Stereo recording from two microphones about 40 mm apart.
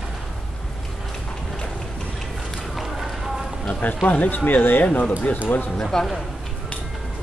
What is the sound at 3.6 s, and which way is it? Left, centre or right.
Speech, left.